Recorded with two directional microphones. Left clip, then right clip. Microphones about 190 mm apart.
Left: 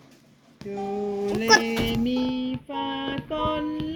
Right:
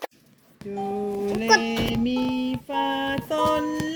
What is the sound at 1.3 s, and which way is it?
Speech, 5° right (ahead or behind).